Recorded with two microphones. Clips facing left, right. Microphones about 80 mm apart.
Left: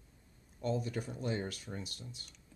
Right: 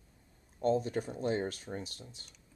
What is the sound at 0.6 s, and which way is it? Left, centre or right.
Speech, right.